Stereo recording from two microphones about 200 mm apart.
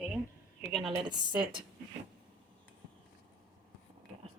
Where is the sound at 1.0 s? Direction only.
20° right (ahead or behind).